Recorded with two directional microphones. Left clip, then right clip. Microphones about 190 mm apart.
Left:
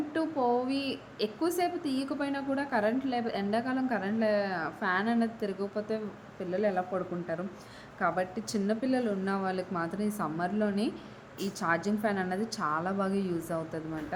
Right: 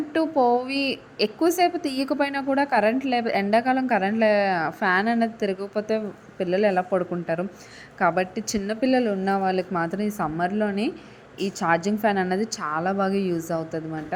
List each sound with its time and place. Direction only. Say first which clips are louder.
0.1 s a woman's voice: right 9 dB; 30° right (ahead or behind)